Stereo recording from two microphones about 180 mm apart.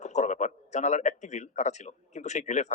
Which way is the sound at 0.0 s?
40° left (ahead or behind).